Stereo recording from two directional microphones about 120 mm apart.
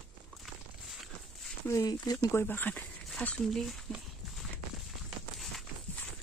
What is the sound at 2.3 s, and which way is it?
Speech, 20° left (ahead or behind).